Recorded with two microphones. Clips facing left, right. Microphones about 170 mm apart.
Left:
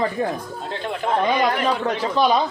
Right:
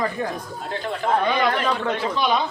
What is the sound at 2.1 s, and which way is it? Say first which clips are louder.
Speech: left 5 dB; 40° left (ahead or behind).